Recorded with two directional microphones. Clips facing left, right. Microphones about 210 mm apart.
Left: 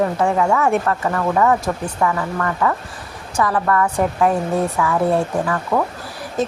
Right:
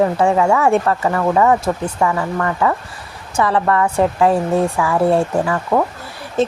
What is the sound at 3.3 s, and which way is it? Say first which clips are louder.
A woman's voice: right 2 dB; 25° right (ahead or behind).